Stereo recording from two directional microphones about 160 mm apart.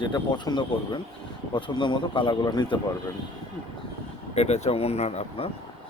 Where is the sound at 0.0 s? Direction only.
25° left (ahead or behind).